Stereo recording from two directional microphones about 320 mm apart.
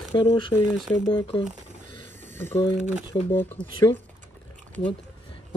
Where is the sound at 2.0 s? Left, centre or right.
Centre.